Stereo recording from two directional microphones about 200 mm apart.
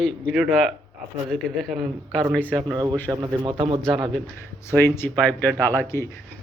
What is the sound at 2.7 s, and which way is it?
A man's voice, 20° right (ahead or behind).